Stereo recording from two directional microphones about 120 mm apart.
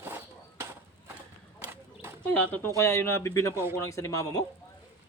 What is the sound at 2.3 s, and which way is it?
A man's voice, 15° left (ahead or behind).